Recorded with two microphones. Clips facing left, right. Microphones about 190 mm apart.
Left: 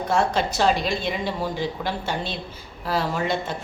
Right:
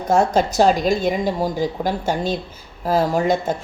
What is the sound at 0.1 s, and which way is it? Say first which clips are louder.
Speech: right 6 dB; 45° right (ahead or behind).